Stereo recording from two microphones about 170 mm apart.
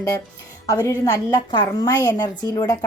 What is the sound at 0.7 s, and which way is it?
A woman's voice, 20° left (ahead or behind).